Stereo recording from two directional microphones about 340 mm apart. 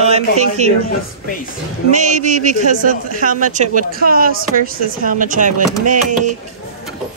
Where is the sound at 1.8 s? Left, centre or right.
Right.